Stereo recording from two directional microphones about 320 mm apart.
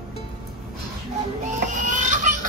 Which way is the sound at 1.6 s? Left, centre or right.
Right.